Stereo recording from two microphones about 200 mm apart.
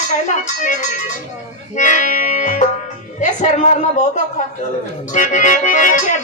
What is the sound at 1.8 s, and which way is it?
Music, 40° left (ahead or behind).